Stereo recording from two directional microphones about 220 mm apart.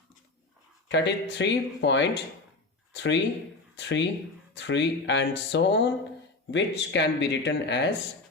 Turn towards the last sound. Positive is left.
turn(degrees=50)  # may be behind; listen again after turning